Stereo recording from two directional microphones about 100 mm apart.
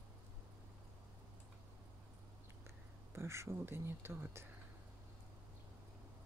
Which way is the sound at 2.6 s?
25° right (ahead or behind).